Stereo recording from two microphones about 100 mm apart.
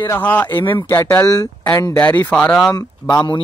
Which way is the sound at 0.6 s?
55° left (ahead or behind).